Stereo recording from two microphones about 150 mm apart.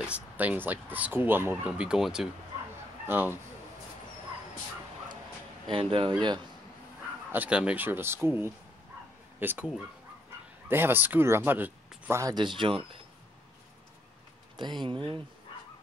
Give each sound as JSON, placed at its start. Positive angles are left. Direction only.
{"t": 0.0, "sound": "speech", "side_deg": -10}
{"t": 3.1, "sound": "speech", "side_deg": -15}
{"t": 5.7, "sound": "speech", "side_deg": -35}
{"t": 7.3, "sound": "speech", "side_deg": -10}
{"t": 10.7, "sound": "speech", "side_deg": -15}
{"t": 14.6, "sound": "speech", "side_deg": -30}